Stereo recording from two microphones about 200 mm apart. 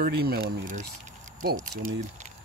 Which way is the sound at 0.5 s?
40° right (ahead or behind).